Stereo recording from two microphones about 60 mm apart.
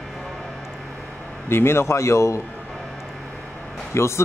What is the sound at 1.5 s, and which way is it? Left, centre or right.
Speech, left.